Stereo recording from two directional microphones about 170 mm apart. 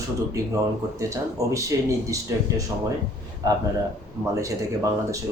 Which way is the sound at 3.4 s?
20° right (ahead or behind).